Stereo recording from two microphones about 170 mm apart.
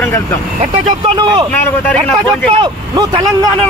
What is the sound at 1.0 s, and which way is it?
Speech, 30° right (ahead or behind).